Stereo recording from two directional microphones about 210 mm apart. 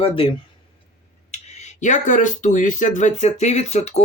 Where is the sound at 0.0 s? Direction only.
25° left (ahead or behind).